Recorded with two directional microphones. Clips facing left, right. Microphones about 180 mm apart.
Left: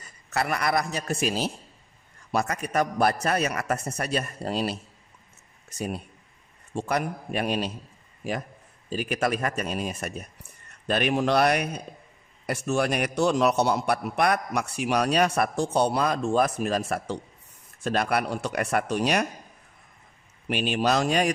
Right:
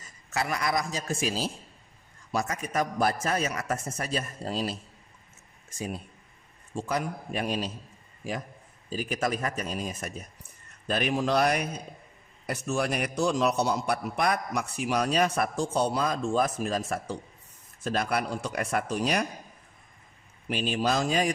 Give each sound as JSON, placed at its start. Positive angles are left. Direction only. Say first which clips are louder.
{"t": 0.0, "sound": "a man's voice", "louder": "left 3 dB", "side_deg": 60}
{"t": 5.8, "sound": "a man's voice", "louder": "left 3 dB", "side_deg": 70}
{"t": 20.4, "sound": "a man's voice", "louder": "left 3 dB", "side_deg": 70}